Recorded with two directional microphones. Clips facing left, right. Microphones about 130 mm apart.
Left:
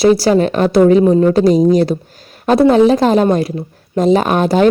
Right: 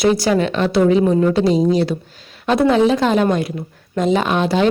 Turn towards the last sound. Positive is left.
turn(degrees=45)  # may be behind; listen again after turning